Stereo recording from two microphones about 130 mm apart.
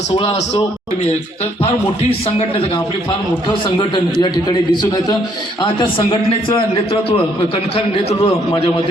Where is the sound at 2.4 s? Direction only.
50° left (ahead or behind).